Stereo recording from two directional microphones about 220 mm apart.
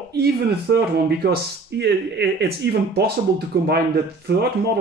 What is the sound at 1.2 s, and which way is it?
Speech, 45° right (ahead or behind).